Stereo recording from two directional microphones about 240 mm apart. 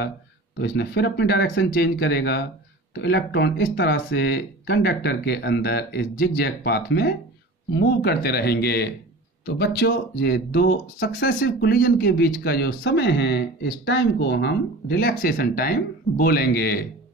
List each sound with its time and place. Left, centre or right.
0.6 s speech: left